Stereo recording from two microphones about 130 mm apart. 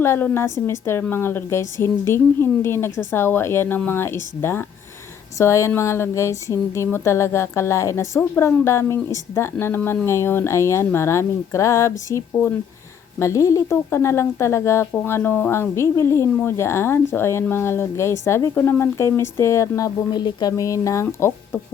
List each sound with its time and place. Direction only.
0.0 s a woman's voice: 20° left (ahead or behind)